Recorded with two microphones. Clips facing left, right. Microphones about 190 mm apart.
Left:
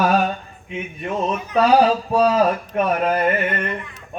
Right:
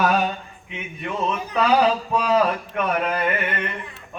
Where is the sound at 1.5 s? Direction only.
35° left (ahead or behind).